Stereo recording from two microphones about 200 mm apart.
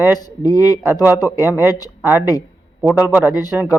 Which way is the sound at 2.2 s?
15° left (ahead or behind).